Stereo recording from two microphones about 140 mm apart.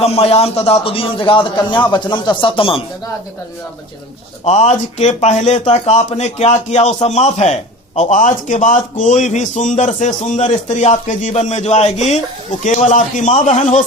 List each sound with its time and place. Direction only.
0.0 s a man's voice: 45° left (ahead or behind)
4.4 s speech: 55° left (ahead or behind)